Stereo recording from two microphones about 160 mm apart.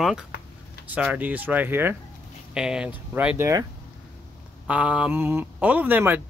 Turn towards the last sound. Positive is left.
turn(degrees=-10)  # may be behind; listen again after turning